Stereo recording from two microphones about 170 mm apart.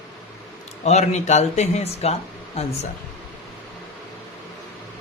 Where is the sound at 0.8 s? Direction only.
40° left (ahead or behind).